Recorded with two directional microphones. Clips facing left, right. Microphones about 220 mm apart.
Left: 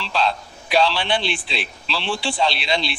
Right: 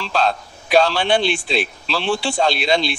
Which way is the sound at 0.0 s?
45° right (ahead or behind).